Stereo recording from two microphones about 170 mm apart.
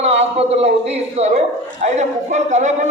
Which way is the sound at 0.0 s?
35° right (ahead or behind).